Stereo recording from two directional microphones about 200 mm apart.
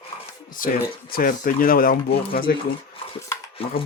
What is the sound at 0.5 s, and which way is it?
Speech, 45° left (ahead or behind).